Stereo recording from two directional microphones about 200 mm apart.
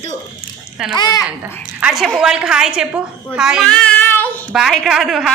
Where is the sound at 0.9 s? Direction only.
20° left (ahead or behind).